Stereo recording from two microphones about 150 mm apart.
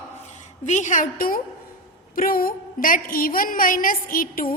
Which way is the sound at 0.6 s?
55° left (ahead or behind).